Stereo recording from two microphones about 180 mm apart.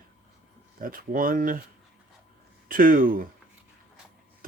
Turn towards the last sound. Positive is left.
turn(degrees=-50)  # may be behind; listen again after turning